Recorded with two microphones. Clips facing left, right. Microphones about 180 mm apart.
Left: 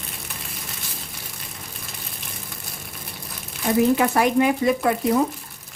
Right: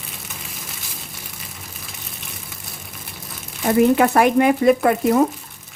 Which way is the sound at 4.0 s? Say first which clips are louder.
Right 4 dB; 60° right (ahead or behind).